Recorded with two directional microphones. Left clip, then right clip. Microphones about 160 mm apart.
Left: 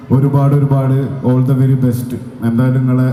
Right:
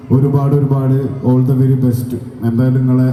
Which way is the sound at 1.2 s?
10° left (ahead or behind).